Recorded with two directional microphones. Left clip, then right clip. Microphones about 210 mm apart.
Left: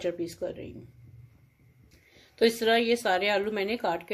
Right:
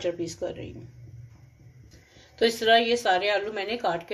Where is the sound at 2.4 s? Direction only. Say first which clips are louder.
Right 3 dB; 30° left (ahead or behind).